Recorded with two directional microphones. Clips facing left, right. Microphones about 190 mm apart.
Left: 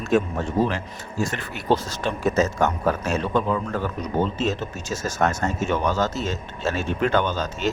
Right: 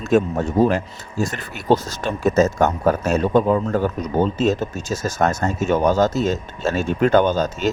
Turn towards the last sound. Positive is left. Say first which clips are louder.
# right 7 dB
turn(degrees=-45)  # may be behind; listen again after turning